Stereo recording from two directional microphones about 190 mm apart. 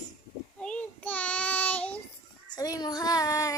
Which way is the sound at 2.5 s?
20° left (ahead or behind).